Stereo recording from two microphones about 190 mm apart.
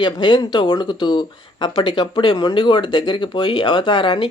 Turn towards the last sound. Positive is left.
turn(degrees=25)  # may be behind; listen again after turning